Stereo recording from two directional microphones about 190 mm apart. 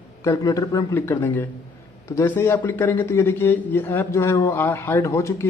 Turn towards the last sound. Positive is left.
turn(degrees=15)  # may be behind; listen again after turning